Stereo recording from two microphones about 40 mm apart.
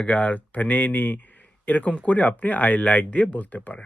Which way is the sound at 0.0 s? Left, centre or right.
Left.